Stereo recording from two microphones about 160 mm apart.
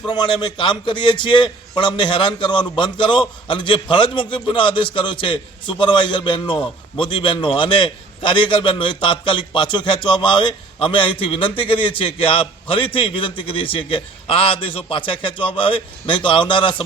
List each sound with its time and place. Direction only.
0.1 s a man's voice: 25° left (ahead or behind)